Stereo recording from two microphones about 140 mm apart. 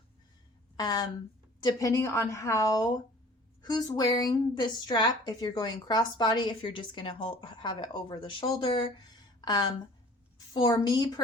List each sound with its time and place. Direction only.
0.8 s a woman's voice: 30° left (ahead or behind)
10.3 s a sound: 30° left (ahead or behind)
10.8 s a woman's voice: 30° left (ahead or behind)